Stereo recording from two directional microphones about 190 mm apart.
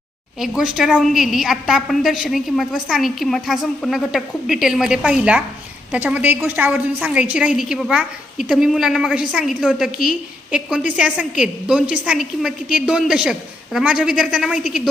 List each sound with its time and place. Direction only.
0.3 s a woman's voice: 5° right (ahead or behind)